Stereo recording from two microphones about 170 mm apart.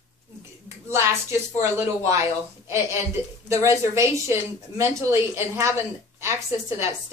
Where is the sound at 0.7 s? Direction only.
15° right (ahead or behind).